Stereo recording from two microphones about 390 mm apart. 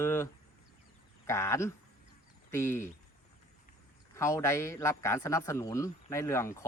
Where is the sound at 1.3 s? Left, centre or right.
Centre.